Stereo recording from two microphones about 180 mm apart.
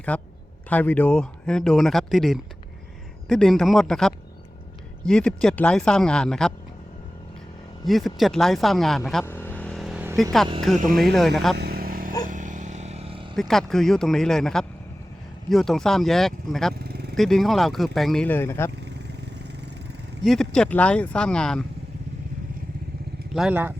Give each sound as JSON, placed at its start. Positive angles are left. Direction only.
{"t": 0.1, "sound": "a man's voice", "side_deg": 5}
{"t": 7.9, "sound": "speech", "side_deg": 0}
{"t": 9.2, "sound": "vehicle", "side_deg": 10}
{"t": 10.9, "sound": "speech", "side_deg": 0}
{"t": 11.5, "sound": "vehicle", "side_deg": -60}
{"t": 13.3, "sound": "speech", "side_deg": 0}
{"t": 18.8, "sound": "vehicle", "side_deg": -70}
{"t": 20.2, "sound": "speech", "side_deg": 5}
{"t": 23.3, "sound": "speech", "side_deg": -5}